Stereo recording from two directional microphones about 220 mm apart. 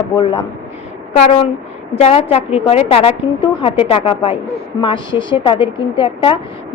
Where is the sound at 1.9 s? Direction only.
25° left (ahead or behind).